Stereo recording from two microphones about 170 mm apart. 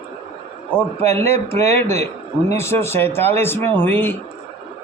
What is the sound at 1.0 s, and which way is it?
Speech, 15° left (ahead or behind).